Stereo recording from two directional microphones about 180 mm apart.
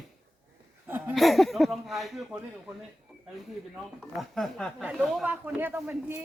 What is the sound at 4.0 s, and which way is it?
Speech, centre (ahead or behind).